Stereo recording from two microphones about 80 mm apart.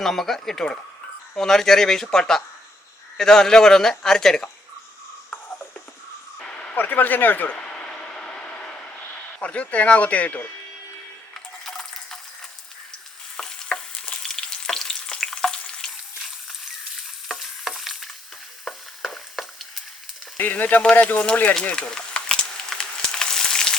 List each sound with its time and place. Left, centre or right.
0.0 s a man's voice: centre
5.3 s a sound: left
6.4 s speech: centre
7.5 s vehicle: centre
11.6 s a sound: centre
13.3 s stir: centre
17.2 s stir: centre
18.6 s frying: centre
20.4 s speech: left
20.9 s a sound: centre